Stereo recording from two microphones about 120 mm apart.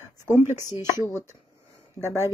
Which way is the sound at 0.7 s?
35° left (ahead or behind).